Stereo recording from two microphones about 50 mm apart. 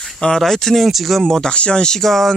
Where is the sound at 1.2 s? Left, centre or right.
Centre.